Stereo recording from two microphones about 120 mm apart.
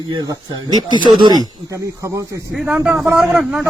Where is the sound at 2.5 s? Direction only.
10° right (ahead or behind).